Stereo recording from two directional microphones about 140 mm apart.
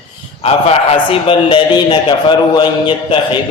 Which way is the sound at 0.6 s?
40° left (ahead or behind).